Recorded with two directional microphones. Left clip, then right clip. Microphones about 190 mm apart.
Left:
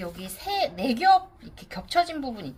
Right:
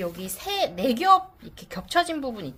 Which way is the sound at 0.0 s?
35° right (ahead or behind).